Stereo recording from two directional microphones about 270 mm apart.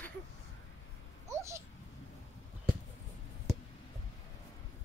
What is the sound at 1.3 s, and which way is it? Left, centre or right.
Babbling, centre.